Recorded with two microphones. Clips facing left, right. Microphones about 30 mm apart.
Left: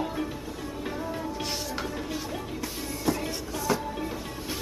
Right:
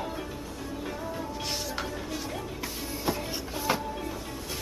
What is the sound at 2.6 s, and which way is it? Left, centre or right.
Music, centre.